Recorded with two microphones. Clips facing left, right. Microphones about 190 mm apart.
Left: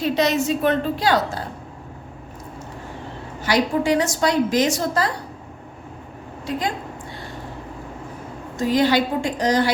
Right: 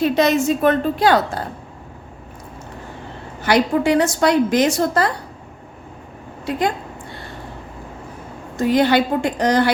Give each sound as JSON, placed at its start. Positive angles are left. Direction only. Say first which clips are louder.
{"t": 0.0, "sound": "a woman's voice", "louder": "right 4 dB", "side_deg": -50}
{"t": 3.4, "sound": "a woman's voice", "louder": "right 3 dB", "side_deg": -60}
{"t": 8.5, "sound": "a woman's voice", "louder": "right 3 dB", "side_deg": -60}